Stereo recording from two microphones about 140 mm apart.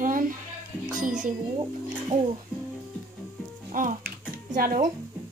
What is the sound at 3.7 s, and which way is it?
Music, 75° right (ahead or behind).